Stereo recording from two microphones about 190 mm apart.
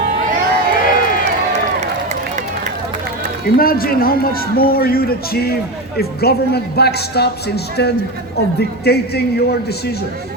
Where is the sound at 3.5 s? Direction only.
50° left (ahead or behind).